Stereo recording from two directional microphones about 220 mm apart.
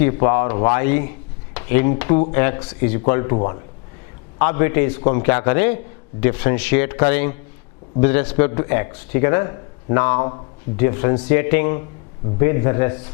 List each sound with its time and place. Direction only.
0.0 s a man's voice: 15° left (ahead or behind)